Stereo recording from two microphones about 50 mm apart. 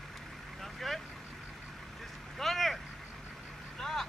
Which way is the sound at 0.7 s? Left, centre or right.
Centre.